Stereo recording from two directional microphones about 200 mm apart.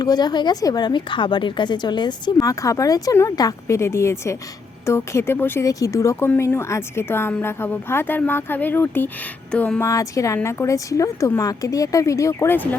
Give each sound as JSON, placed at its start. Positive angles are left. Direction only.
{"t": 0.0, "sound": "a woman's voice", "side_deg": 20}